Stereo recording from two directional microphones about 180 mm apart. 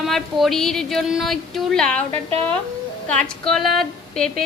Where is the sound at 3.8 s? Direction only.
Centre (ahead or behind).